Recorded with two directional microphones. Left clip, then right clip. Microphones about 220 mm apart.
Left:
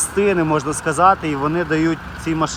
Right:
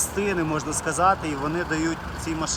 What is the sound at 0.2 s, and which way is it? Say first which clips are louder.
Speech: left 9 dB; centre (ahead or behind).